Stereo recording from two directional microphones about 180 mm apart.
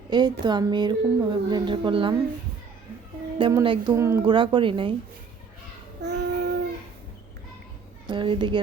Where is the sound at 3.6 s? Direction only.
30° right (ahead or behind).